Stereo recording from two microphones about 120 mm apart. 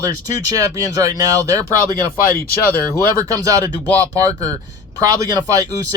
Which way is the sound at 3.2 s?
30° right (ahead or behind).